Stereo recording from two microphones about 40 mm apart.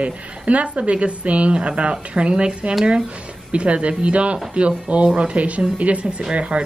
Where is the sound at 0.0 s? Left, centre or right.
Right.